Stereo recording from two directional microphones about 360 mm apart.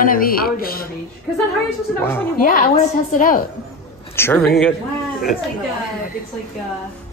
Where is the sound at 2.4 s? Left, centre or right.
Left.